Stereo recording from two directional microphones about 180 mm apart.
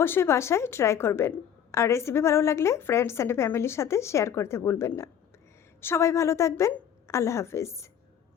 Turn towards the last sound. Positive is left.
turn(degrees=15)  # may be behind; listen again after turning